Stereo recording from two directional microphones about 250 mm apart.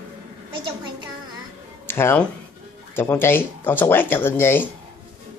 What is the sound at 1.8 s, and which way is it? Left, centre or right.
Speech, centre.